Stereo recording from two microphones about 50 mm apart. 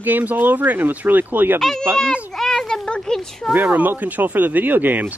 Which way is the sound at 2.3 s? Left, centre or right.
Centre.